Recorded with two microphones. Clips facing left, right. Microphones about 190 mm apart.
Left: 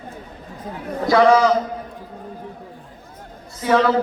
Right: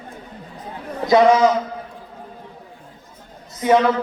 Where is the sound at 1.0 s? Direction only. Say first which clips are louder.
Right 1 dB; 20° right (ahead or behind).